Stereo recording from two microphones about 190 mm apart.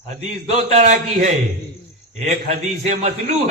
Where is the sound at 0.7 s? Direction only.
40° right (ahead or behind).